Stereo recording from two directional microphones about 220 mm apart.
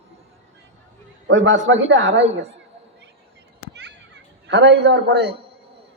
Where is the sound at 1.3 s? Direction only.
60° right (ahead or behind).